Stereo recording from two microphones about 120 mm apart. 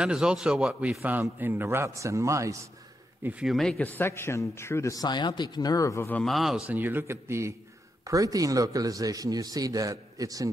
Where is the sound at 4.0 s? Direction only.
20° left (ahead or behind).